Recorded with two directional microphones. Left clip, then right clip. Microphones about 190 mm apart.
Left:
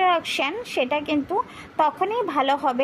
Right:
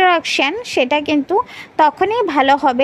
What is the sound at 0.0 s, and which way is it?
Speech, 30° right (ahead or behind).